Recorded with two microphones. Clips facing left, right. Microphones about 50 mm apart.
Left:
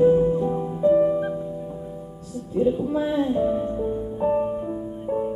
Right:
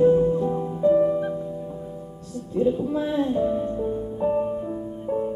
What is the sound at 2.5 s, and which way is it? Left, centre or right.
Music, centre.